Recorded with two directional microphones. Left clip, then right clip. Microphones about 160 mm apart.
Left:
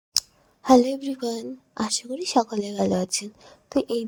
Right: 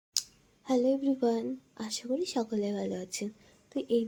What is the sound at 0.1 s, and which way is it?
A woman's voice, 70° left (ahead or behind).